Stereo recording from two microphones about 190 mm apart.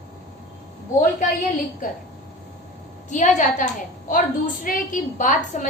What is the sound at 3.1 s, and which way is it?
A woman's voice, 40° left (ahead or behind).